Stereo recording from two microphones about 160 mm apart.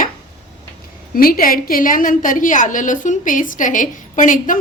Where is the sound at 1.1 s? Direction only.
65° left (ahead or behind).